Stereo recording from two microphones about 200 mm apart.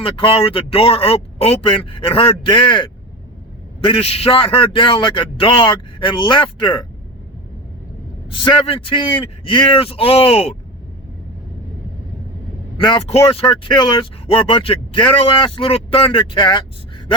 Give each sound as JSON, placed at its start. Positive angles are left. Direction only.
{"t": 0.0, "sound": "speech", "side_deg": 25}
{"t": 8.3, "sound": "speech", "side_deg": 25}
{"t": 12.7, "sound": "speech", "side_deg": 25}